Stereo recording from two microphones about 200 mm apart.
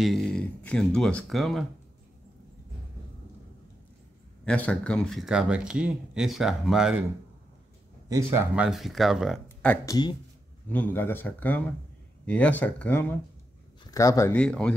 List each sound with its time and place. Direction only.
0.0 s speech: centre (ahead or behind)
4.5 s speech: 5° left (ahead or behind)
8.1 s speech: 15° right (ahead or behind); by 9.8 s 5° left (ahead or behind)
9.8 s speech: 20° left (ahead or behind)
10.7 s speech: 10° left (ahead or behind)